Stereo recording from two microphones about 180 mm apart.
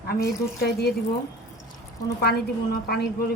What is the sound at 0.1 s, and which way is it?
Speech, 60° left (ahead or behind).